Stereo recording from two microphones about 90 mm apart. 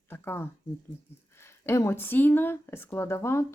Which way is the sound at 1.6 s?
30° left (ahead or behind).